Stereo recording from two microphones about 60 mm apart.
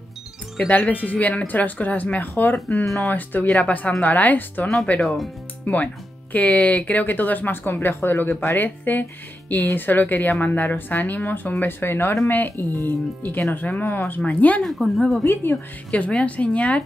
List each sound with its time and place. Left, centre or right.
0.7 s speech: left
2.5 s speech: left
3.1 s speech: left
5.0 s speech: centre
5.7 s speech: left
14.6 s speech: centre
15.9 s speech: centre